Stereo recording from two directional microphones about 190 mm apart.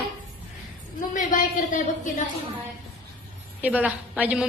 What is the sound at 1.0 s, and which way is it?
A woman's voice, 45° left (ahead or behind).